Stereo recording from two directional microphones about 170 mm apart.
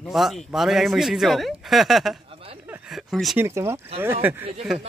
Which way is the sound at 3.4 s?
15° right (ahead or behind).